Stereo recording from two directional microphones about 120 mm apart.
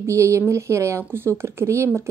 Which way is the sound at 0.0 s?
25° right (ahead or behind).